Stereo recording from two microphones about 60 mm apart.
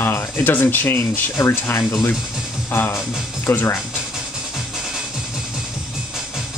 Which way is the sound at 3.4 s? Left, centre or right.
Left.